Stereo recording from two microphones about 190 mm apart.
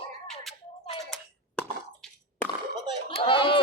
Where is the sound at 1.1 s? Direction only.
5° left (ahead or behind).